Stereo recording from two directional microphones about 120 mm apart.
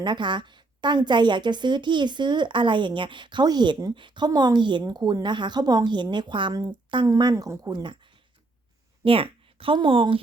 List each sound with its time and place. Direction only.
0.0 s a woman's voice: 40° right (ahead or behind)
9.0 s speech: 50° right (ahead or behind)